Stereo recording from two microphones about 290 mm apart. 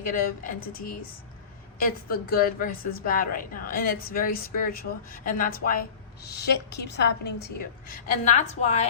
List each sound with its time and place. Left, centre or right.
0.0 s a woman's voice: left
2.0 s a woman's voice: left